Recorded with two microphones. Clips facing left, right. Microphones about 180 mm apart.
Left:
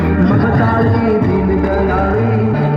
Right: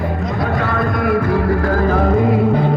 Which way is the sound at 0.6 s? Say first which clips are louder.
Left 6 dB; 40° left (ahead or behind).